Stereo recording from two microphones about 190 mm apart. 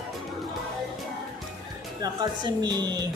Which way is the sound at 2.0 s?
20° right (ahead or behind).